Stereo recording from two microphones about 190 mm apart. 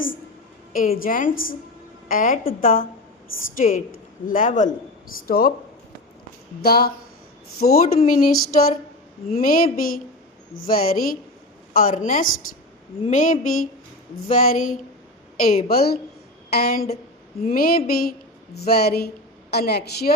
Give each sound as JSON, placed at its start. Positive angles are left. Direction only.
{"t": 0.7, "sound": "a woman's voice", "side_deg": 50}
{"t": 6.6, "sound": "a woman's voice", "side_deg": 55}